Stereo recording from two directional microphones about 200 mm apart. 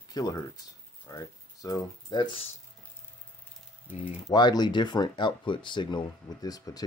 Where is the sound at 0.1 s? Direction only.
20° left (ahead or behind).